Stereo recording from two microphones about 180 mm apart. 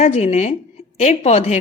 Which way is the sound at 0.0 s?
35° left (ahead or behind).